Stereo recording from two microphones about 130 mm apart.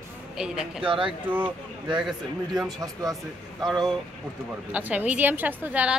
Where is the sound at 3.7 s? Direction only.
Centre (ahead or behind).